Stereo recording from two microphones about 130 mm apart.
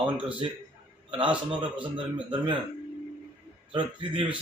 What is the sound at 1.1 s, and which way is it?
Speech, 40° right (ahead or behind).